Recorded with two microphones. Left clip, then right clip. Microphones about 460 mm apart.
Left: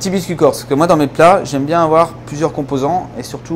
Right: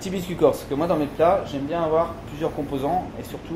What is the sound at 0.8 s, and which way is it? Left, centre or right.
Speech, left.